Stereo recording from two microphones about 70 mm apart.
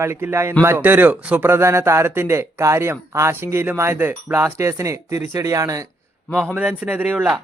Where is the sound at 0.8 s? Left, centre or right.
Right.